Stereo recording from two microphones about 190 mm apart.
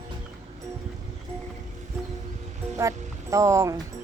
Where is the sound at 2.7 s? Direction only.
15° right (ahead or behind).